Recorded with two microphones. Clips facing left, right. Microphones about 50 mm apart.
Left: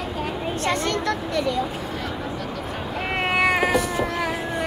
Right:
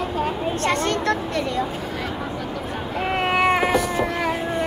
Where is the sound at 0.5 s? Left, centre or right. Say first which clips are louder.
Right 1 dB; right.